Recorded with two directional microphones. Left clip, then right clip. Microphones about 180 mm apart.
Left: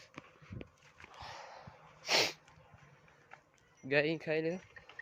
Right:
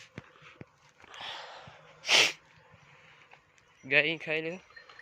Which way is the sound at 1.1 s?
10° right (ahead or behind).